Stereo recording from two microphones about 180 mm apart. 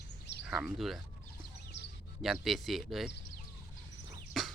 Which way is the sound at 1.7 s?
70° left (ahead or behind).